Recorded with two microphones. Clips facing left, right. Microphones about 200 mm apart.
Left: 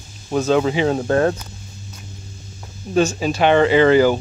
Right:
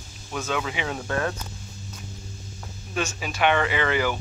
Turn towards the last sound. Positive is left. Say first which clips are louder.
# left 12 dB
turn(degrees=35)  # may be behind; listen again after turning